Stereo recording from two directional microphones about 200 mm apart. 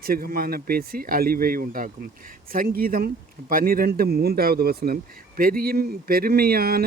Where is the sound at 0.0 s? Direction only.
50° right (ahead or behind).